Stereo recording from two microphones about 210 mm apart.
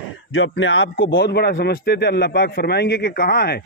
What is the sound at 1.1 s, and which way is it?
A man's voice, 50° left (ahead or behind).